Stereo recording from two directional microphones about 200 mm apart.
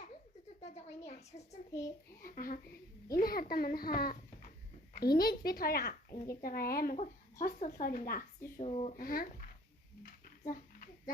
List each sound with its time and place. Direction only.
0.6 s a woman's voice: 35° left (ahead or behind)
2.2 s a child's voice: 45° left (ahead or behind)
6.9 s a child's voice: 35° left (ahead or behind)
8.6 s a woman's voice: 30° left (ahead or behind)
9.0 s a child's voice: 45° left (ahead or behind)
10.0 s a sound: 45° left (ahead or behind)